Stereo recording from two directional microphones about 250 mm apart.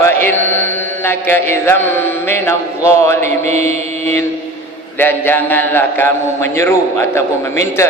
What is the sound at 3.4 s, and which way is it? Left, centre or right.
Mantra, right.